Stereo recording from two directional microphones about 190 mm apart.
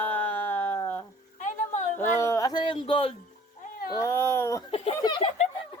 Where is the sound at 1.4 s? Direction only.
40° left (ahead or behind).